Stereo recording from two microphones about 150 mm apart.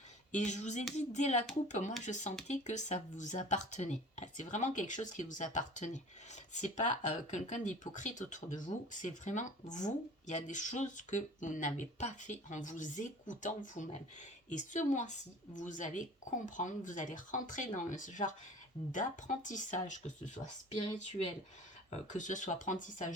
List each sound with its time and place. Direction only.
0.3 s a sound: 50° left (ahead or behind)
2.5 s speech: 50° left (ahead or behind)
21.8 s speech: 55° left (ahead or behind)